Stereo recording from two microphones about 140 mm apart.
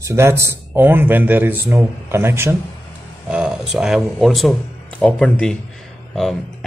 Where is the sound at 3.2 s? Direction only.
5° right (ahead or behind).